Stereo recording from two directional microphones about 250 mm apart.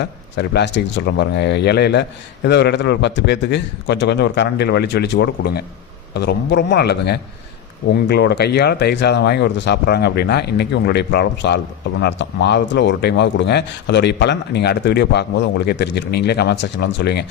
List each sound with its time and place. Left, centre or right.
0.0 s speech: left